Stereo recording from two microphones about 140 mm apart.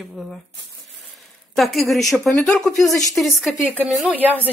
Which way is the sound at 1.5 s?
Centre (ahead or behind).